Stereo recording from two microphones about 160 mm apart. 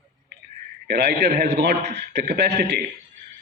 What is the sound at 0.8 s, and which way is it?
A man's voice, 90° right.